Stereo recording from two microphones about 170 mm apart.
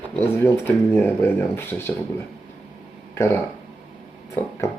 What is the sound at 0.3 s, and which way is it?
Speech, 15° left (ahead or behind).